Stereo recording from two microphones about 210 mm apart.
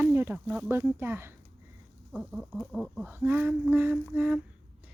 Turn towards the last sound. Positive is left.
turn(degrees=-5)  # may be behind; listen again after turning